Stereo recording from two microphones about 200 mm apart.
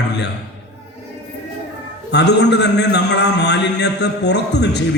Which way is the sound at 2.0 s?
60° left (ahead or behind).